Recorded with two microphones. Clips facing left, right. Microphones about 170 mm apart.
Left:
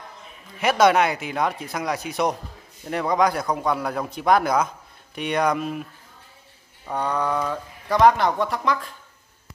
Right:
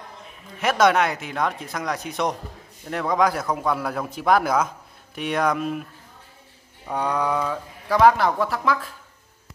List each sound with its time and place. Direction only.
0.6 s speech: centre (ahead or behind)
6.9 s speech: 10° right (ahead or behind)